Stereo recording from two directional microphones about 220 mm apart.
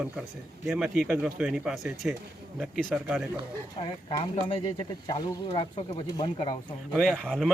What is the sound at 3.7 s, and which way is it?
Speech, 20° left (ahead or behind).